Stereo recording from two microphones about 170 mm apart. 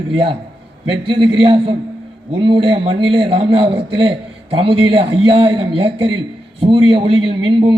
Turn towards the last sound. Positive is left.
turn(degrees=-25)  # may be behind; listen again after turning